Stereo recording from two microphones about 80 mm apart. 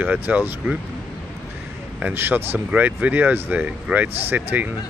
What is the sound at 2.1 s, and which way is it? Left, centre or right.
Speech, right.